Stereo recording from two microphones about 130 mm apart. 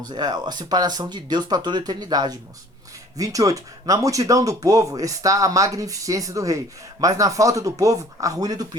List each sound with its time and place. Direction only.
0.0 s speech: 30° right (ahead or behind)